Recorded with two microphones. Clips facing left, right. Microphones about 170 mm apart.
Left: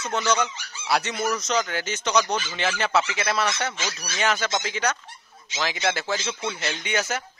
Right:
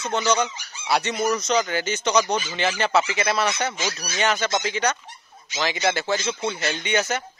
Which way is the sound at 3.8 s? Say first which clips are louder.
Right 3 dB; 15° right (ahead or behind).